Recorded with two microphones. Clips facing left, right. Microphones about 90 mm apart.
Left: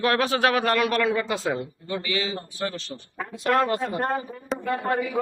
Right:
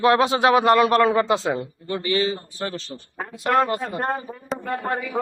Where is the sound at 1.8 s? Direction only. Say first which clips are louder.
Right 6 dB; 40° right (ahead or behind).